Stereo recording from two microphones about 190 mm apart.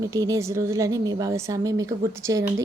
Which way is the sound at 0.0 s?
20° right (ahead or behind).